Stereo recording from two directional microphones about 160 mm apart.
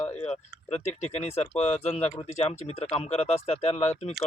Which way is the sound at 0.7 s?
40° left (ahead or behind).